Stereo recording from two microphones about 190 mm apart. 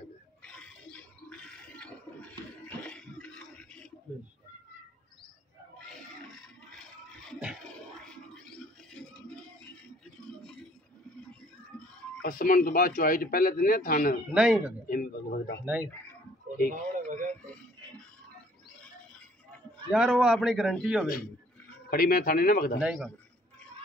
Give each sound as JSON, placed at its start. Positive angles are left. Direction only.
{"t": 0.4, "sound": "a sound", "side_deg": 5}
{"t": 6.7, "sound": "a sound", "side_deg": 5}
{"t": 8.9, "sound": "music", "side_deg": 5}
{"t": 12.2, "sound": "a man's voice", "side_deg": 50}
{"t": 14.3, "sound": "a man's voice", "side_deg": -5}
{"t": 14.9, "sound": "a man's voice", "side_deg": 50}
{"t": 15.6, "sound": "speech", "side_deg": -10}
{"t": 16.7, "sound": "radio", "side_deg": -40}
{"t": 19.9, "sound": "a man's voice", "side_deg": -5}
{"t": 21.9, "sound": "a man's voice", "side_deg": 50}
{"t": 22.8, "sound": "a man's voice", "side_deg": -5}